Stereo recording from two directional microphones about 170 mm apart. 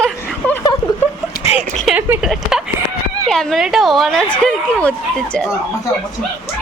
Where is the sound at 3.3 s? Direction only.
Centre (ahead or behind).